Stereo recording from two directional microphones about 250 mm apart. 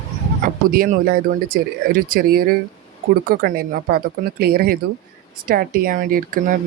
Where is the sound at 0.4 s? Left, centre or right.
Right.